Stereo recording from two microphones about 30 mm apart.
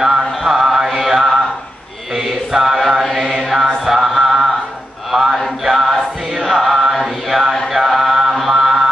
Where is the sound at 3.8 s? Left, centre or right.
Centre.